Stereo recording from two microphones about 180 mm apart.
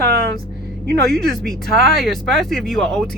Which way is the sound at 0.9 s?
65° right (ahead or behind).